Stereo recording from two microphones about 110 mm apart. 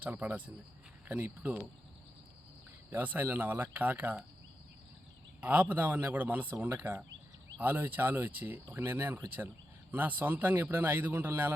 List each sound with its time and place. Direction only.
0.0 s speech: 15° right (ahead or behind)
2.9 s speech: 15° right (ahead or behind)
5.4 s speech: 15° right (ahead or behind)